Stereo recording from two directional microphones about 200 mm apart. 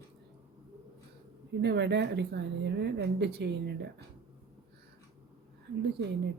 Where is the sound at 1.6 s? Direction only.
60° right (ahead or behind).